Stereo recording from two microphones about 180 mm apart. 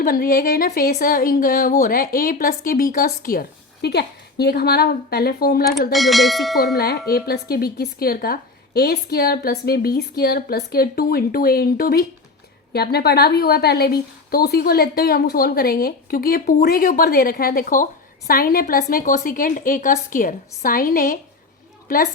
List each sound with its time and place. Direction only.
0.0 s a woman's voice: 55° left (ahead or behind)
5.9 s bell: centre (ahead or behind)
6.7 s a woman's voice: 60° left (ahead or behind)